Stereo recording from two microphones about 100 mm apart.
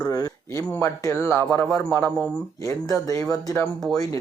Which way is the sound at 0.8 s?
25° left (ahead or behind).